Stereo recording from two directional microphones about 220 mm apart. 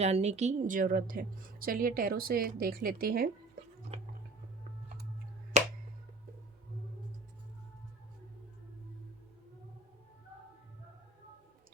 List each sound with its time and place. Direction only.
0.0 s a woman's voice: 30° right (ahead or behind)
3.9 s music: 25° right (ahead or behind)
5.5 s finger snapping: 30° right (ahead or behind)